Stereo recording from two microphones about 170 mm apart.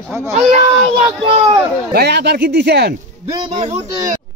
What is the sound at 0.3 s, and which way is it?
Speech, 40° right (ahead or behind).